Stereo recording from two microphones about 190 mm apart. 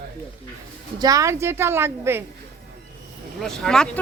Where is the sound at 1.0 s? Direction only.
20° right (ahead or behind).